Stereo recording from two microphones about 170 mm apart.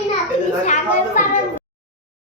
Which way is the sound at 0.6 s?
45° left (ahead or behind).